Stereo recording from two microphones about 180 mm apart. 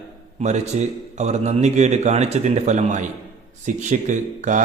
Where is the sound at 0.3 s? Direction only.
40° right (ahead or behind).